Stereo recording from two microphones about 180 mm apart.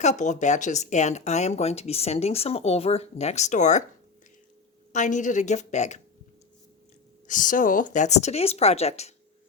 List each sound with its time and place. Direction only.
0.0 s speech: 40° left (ahead or behind)
4.9 s a woman's voice: 45° left (ahead or behind)
7.3 s speech: 45° left (ahead or behind)